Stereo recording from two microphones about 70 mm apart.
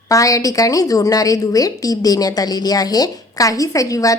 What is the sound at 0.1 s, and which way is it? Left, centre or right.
A woman's voice, left.